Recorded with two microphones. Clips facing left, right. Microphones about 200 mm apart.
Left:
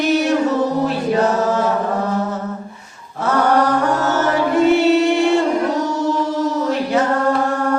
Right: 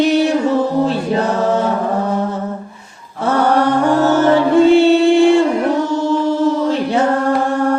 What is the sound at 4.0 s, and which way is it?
Mantra, 30° right (ahead or behind).